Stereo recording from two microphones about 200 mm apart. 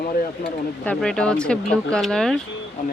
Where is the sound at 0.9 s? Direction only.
5° left (ahead or behind).